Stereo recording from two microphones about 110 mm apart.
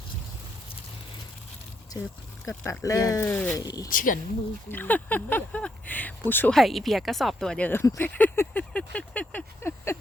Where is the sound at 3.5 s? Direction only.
35° left (ahead or behind).